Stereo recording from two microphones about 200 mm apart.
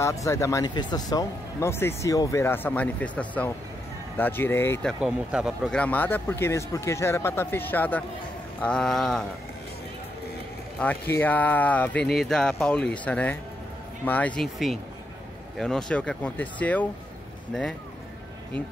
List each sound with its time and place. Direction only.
0.0 s speech: 15° left (ahead or behind)
5.0 s speech: 5° right (ahead or behind)
10.8 s speech: 10° left (ahead or behind)